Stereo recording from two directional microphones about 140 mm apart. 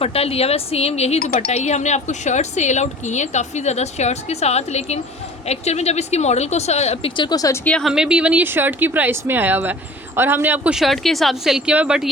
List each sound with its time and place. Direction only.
0.0 s speech: 45° left (ahead or behind)
7.2 s speech: 30° left (ahead or behind)
7.6 s speech: 5° left (ahead or behind)